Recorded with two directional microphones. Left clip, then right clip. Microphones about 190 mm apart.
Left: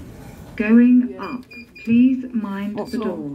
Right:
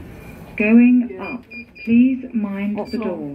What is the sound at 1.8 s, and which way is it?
Speech, 45° left (ahead or behind).